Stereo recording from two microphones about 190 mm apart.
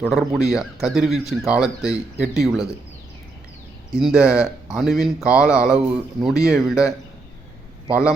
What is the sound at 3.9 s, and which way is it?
Speech, 5° right (ahead or behind).